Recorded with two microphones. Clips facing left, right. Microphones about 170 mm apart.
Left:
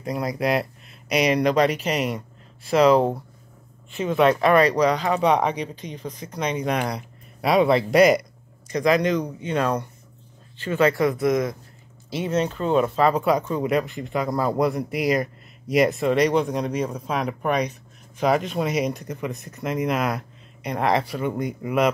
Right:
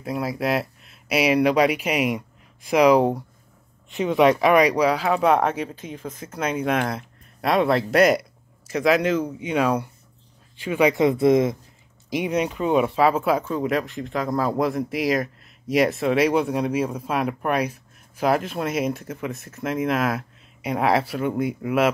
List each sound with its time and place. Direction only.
0.0 s speech: 5° right (ahead or behind); by 11.5 s 25° right (ahead or behind)
12.1 s speech: 15° right (ahead or behind)